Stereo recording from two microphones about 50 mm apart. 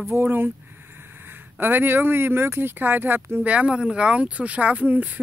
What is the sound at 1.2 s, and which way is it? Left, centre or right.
Speech, right.